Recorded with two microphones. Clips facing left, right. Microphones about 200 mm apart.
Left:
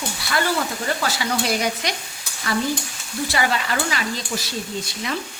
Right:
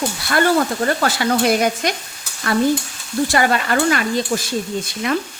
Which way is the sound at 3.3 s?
50° right (ahead or behind).